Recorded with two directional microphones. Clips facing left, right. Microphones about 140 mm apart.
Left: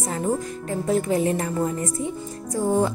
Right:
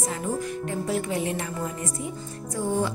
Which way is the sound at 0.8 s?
40° left (ahead or behind).